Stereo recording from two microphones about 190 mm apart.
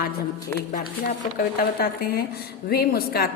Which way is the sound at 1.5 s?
55° left (ahead or behind).